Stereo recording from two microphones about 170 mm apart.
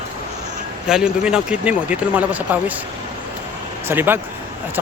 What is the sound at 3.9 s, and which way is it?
Speech, 10° right (ahead or behind).